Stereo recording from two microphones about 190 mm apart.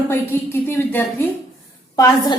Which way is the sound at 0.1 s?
10° left (ahead or behind).